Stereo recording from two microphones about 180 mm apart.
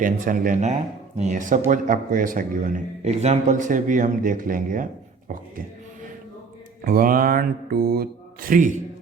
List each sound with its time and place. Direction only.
0.0 s speech: 50° right (ahead or behind)
6.8 s speech: 55° right (ahead or behind)